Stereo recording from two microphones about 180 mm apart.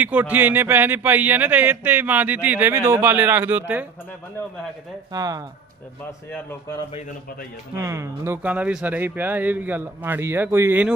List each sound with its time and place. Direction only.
0.0 s speech: 10° right (ahead or behind)
5.1 s speech: 20° right (ahead or behind)
6.1 s speech: 15° left (ahead or behind)
7.8 s speech: 15° right (ahead or behind)